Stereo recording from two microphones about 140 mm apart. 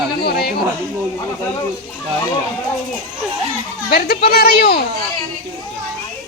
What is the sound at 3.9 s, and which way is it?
Speech, 90° left.